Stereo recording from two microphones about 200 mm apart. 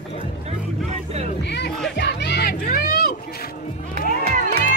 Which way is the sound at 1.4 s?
60° left (ahead or behind).